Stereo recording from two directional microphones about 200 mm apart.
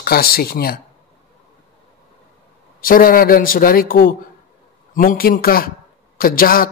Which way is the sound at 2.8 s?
45° left (ahead or behind).